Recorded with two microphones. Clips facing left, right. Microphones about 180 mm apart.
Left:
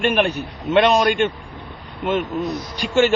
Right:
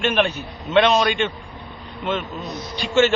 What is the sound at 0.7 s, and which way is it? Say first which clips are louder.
Speech: left 1 dB; 15° left (ahead or behind).